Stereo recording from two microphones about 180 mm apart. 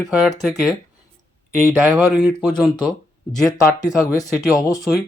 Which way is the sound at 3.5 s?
20° left (ahead or behind).